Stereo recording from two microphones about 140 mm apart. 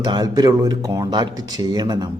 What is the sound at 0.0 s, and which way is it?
Speech, 30° right (ahead or behind).